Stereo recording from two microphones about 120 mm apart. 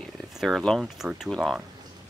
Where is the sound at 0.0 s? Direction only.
Centre (ahead or behind).